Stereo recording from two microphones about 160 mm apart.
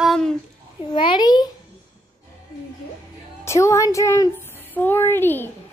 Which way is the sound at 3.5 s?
20° left (ahead or behind).